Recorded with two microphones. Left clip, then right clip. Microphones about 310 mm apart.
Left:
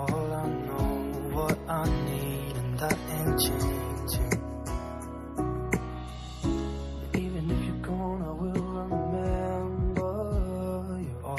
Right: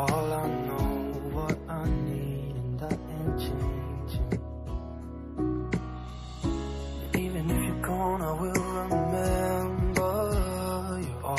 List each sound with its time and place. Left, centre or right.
0.0 s music: centre
2.8 s music: left
6.4 s music: centre
7.1 s music: centre
8.2 s music: right
10.2 s music: right